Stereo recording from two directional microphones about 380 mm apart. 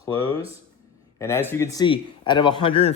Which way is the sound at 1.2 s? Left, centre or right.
Centre.